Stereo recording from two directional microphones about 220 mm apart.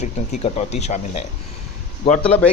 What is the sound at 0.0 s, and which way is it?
A man's voice, 30° left (ahead or behind).